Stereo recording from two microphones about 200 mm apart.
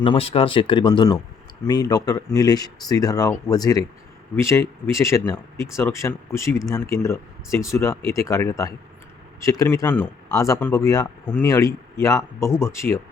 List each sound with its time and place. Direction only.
0.0 s speech: 25° left (ahead or behind)